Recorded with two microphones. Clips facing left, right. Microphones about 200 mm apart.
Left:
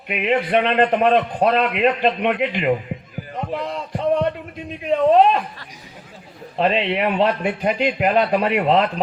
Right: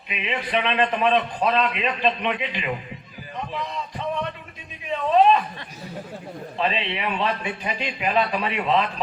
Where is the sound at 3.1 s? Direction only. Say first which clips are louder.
Left 5 dB; 55° left (ahead or behind).